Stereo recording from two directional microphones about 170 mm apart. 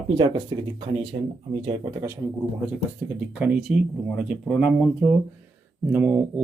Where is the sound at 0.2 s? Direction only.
30° right (ahead or behind).